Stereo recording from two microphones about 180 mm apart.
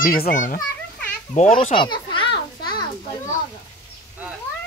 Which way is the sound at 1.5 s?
30° left (ahead or behind).